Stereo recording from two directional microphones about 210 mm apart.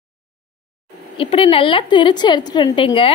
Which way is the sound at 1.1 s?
25° left (ahead or behind).